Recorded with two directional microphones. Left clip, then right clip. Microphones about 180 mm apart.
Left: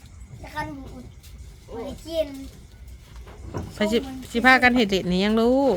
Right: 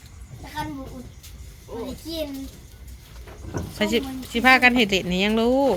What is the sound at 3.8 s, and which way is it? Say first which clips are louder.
Speech: even; 25° left (ahead or behind).